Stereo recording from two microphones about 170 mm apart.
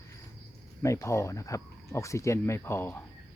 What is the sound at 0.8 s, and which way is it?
Speech, 15° left (ahead or behind).